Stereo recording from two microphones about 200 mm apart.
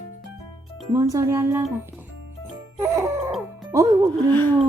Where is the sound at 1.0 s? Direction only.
15° right (ahead or behind).